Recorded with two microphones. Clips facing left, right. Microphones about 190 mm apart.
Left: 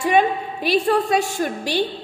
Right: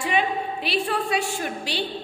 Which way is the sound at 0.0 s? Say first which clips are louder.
Left 6 dB; 45° left (ahead or behind).